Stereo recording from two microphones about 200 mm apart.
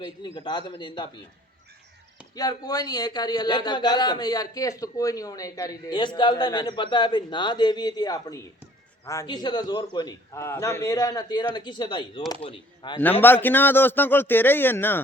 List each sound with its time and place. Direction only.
0.3 s a man's voice: 25° left (ahead or behind)
2.3 s a man's voice: 20° left (ahead or behind)
13.2 s speech: 10° left (ahead or behind)